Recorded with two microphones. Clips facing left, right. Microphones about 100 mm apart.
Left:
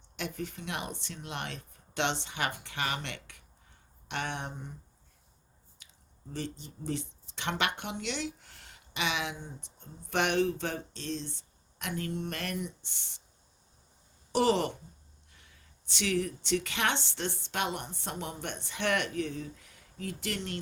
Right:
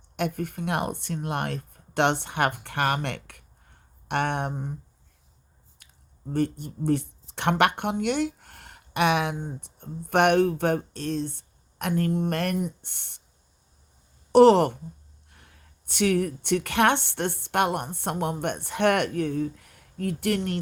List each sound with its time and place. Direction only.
0.2 s speech: 50° right (ahead or behind)
5.8 s a sound: 55° right (ahead or behind)
6.3 s speech: 55° right (ahead or behind)
14.3 s speech: 55° right (ahead or behind)